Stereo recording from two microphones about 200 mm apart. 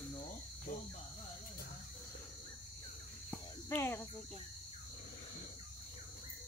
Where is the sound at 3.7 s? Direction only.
15° left (ahead or behind).